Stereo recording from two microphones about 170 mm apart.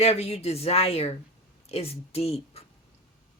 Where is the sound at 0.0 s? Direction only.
40° left (ahead or behind).